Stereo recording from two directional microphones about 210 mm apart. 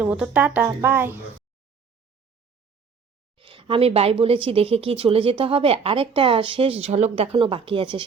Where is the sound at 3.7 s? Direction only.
25° right (ahead or behind).